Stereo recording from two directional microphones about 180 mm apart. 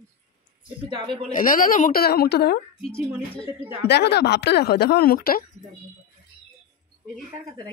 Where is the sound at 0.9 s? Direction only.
25° right (ahead or behind).